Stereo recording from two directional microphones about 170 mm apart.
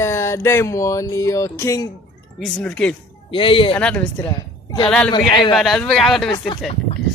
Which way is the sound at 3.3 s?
30° left (ahead or behind).